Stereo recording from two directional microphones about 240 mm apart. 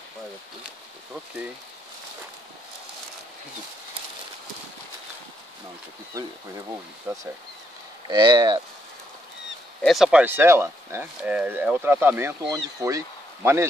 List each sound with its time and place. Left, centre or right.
7.1 s speech: centre
9.8 s speech: centre